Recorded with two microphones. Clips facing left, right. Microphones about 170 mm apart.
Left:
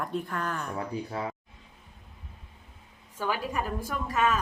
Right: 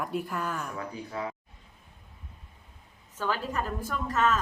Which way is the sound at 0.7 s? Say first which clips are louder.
Left 3 dB; 35° left (ahead or behind).